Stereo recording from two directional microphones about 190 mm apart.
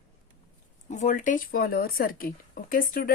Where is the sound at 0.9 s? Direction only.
40° left (ahead or behind).